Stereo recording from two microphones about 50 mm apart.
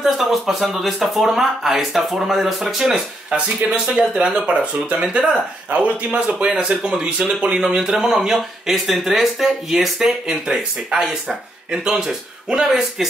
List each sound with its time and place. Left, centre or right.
0.0 s speech: centre
3.3 s speech: right; by 8.4 s centre
8.4 s speech: centre